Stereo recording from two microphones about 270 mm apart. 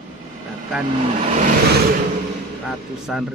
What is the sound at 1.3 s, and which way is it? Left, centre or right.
Vehicle, right.